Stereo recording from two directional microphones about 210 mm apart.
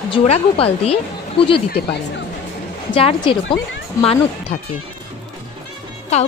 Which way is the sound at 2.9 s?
25° left (ahead or behind).